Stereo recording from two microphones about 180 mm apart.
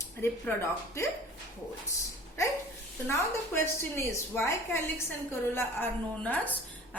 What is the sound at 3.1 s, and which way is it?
A woman's voice, 15° left (ahead or behind).